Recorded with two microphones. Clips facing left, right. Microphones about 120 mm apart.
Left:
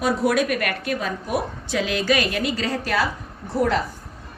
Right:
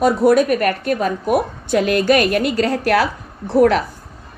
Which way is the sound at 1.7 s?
55° right (ahead or behind).